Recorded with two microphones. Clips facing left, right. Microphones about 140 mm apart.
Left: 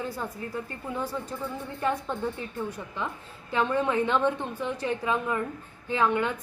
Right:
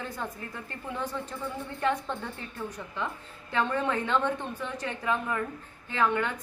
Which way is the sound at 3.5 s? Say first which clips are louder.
Left 3 dB; 15° left (ahead or behind).